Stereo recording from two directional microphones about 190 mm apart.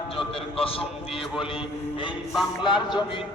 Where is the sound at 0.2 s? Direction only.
30° left (ahead or behind).